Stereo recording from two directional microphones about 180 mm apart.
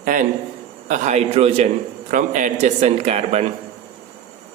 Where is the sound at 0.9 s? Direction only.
40° right (ahead or behind).